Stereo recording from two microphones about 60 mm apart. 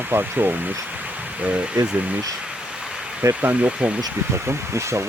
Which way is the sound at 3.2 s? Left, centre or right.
Right.